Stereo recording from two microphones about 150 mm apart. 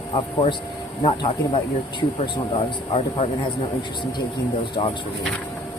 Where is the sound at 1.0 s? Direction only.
30° left (ahead or behind).